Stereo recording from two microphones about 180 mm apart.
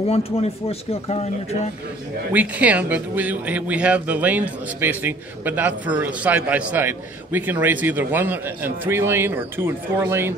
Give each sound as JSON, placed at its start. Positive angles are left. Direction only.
{"t": 0.0, "sound": "speech", "side_deg": 35}
{"t": 2.3, "sound": "speech", "side_deg": -10}